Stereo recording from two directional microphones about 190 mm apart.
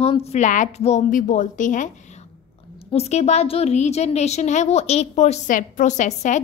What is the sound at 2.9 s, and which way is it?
A woman's voice, 35° left (ahead or behind).